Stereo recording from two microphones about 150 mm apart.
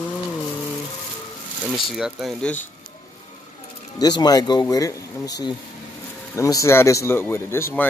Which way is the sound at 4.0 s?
25° left (ahead or behind).